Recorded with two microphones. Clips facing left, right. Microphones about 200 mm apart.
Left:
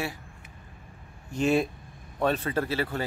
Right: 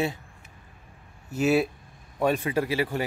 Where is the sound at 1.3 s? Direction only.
5° right (ahead or behind).